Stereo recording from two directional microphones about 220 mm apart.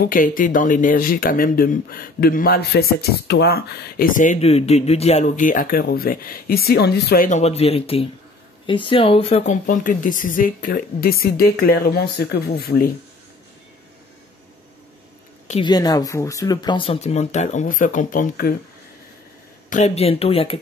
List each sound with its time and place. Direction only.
0.0 s speech: 40° left (ahead or behind)
15.4 s a sound: 30° left (ahead or behind)
15.7 s speech: 15° left (ahead or behind); by 18.5 s 35° left (ahead or behind)
19.7 s speech: 30° left (ahead or behind)